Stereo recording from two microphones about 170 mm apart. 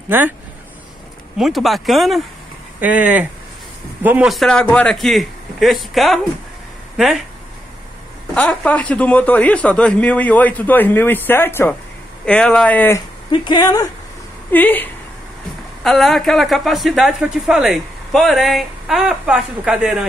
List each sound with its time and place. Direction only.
0.1 s speech: 10° right (ahead or behind)
1.4 s speech: centre (ahead or behind)
8.4 s speech: 10° left (ahead or behind)
13.3 s speech: 25° left (ahead or behind)
14.5 s speech: 10° left (ahead or behind)